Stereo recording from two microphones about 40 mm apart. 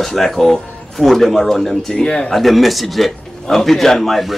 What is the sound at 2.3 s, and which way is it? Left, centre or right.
Speech, centre.